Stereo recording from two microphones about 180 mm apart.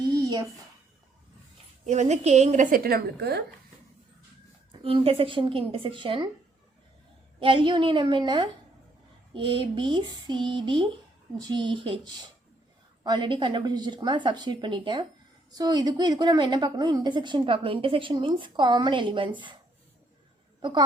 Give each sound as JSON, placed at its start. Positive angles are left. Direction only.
{"t": 0.0, "sound": "a sound", "side_deg": -20}
{"t": 1.8, "sound": "a woman's voice", "side_deg": -40}
{"t": 4.7, "sound": "a woman's voice", "side_deg": -30}
{"t": 7.3, "sound": "a woman's voice", "side_deg": -30}
{"t": 20.6, "sound": "a woman's voice", "side_deg": -25}